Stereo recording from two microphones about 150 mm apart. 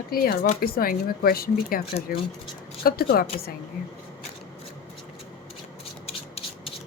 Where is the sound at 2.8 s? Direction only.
90° left.